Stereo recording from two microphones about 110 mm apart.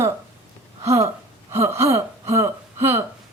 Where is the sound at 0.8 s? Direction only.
30° right (ahead or behind).